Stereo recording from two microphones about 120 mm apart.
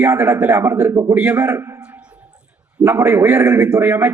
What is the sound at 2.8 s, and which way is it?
A man's voice, 20° right (ahead or behind).